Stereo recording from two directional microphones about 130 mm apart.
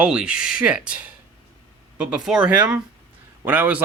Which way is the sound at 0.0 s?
10° right (ahead or behind).